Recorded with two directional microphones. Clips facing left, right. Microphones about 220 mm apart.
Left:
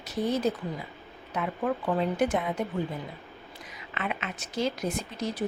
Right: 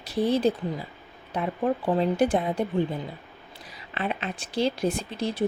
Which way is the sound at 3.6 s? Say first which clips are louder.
Right 4 dB; 35° right (ahead or behind).